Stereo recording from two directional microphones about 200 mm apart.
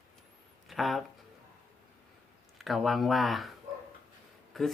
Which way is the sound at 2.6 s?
Centre (ahead or behind).